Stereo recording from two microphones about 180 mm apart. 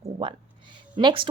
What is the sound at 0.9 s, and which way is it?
Speech, 30° right (ahead or behind).